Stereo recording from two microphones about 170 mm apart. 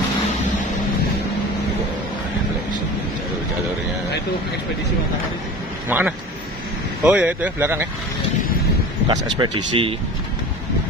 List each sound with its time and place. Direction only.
5.9 s speech: 10° right (ahead or behind)
9.0 s speech: 25° right (ahead or behind)